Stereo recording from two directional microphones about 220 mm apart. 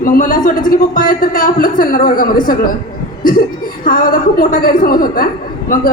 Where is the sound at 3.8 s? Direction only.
40° left (ahead or behind).